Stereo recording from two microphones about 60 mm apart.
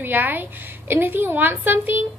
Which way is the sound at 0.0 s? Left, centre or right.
Right.